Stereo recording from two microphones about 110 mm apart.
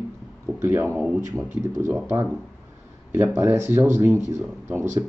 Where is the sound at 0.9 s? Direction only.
5° right (ahead or behind).